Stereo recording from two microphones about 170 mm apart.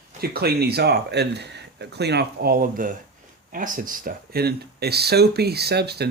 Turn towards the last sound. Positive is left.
turn(degrees=-70)  # may be behind; listen again after turning